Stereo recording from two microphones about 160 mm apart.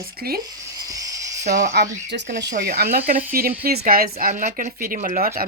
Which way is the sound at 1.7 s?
90° right.